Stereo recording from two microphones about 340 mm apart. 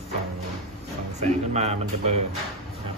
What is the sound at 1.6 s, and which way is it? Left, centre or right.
Speech, centre.